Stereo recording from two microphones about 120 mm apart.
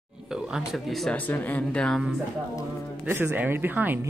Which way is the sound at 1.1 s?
15° left (ahead or behind).